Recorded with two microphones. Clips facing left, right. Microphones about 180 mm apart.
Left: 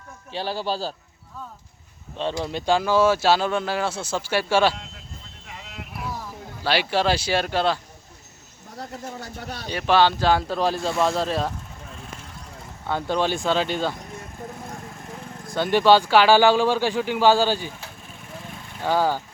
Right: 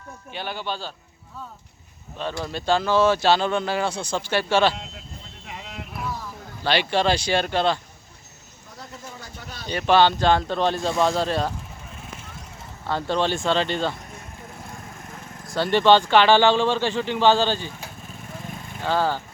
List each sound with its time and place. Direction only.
0.3 s speech: 30° left (ahead or behind)
2.1 s speech: 25° left (ahead or behind); by 4.7 s 10° left (ahead or behind)
6.6 s speech: 5° left (ahead or behind)
8.8 s speech: 55° left (ahead or behind)
9.6 s speech: 5° left (ahead or behind)
12.9 s speech: 5° left (ahead or behind)
15.6 s speech: 10° left (ahead or behind)
18.8 s speech: 10° left (ahead or behind)